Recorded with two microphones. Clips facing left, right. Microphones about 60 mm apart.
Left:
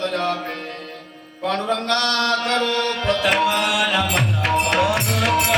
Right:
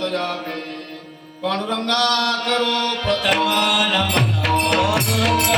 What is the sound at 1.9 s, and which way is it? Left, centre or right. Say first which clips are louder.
Mantra: right 2 dB; centre.